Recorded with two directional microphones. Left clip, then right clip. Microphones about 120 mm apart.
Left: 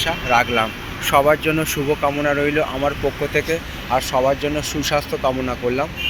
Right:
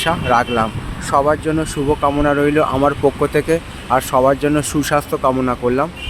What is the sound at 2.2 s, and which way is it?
Speech, 50° right (ahead or behind).